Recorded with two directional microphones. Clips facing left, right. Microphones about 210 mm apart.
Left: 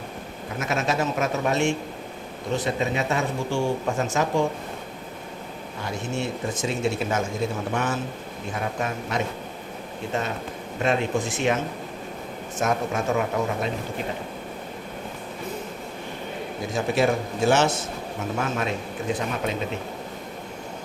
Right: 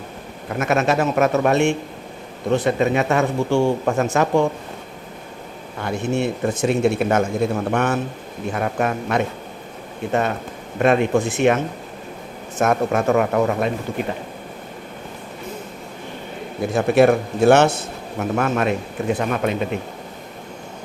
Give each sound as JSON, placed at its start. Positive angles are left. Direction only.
{"t": 0.6, "sound": "speech", "side_deg": -60}
{"t": 5.8, "sound": "speech", "side_deg": -60}
{"t": 16.6, "sound": "speech", "side_deg": -60}